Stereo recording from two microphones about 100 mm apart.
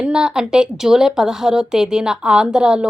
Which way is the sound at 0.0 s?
10° right (ahead or behind).